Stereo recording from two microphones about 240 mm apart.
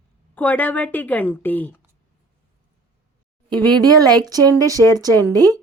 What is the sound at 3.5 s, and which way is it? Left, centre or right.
A woman's voice, centre.